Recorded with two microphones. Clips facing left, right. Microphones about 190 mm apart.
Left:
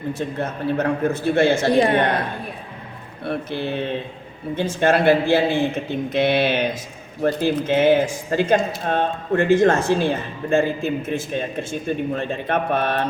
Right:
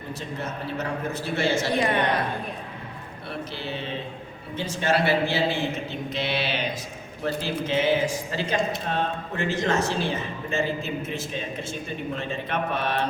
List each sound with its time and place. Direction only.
0.1 s speech: 55° left (ahead or behind)
3.2 s speech: 55° left (ahead or behind)